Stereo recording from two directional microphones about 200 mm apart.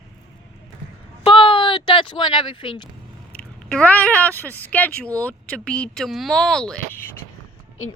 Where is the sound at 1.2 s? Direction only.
25° left (ahead or behind).